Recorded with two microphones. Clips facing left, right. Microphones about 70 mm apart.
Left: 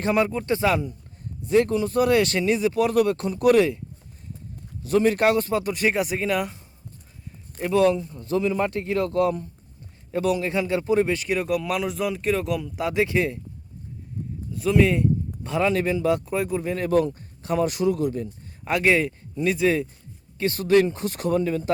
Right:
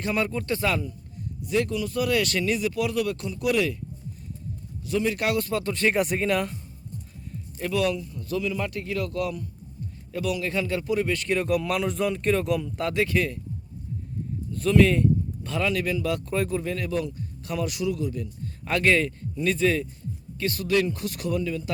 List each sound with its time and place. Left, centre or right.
0.0 s a man's voice: left
1.4 s speech: left
4.8 s speech: left; by 5.9 s centre
5.9 s speech: centre
7.7 s a man's voice: left
11.1 s speech: centre
12.9 s a man's voice: left
14.5 s a man's voice: centre
16.3 s speech: centre
16.9 s speech: left
17.4 s speech: left
18.6 s speech: centre
20.4 s speech: left